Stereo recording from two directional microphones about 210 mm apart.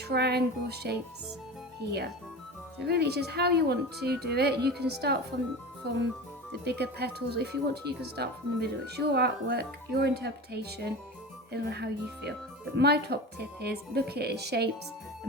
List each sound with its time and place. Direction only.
0.1 s speech: 50° right (ahead or behind)